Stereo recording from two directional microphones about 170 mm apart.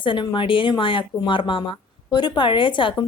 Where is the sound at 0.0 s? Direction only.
30° left (ahead or behind).